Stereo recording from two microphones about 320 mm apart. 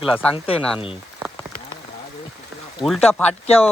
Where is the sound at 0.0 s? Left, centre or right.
Centre.